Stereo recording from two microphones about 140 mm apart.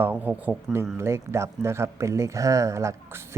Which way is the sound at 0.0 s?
10° right (ahead or behind).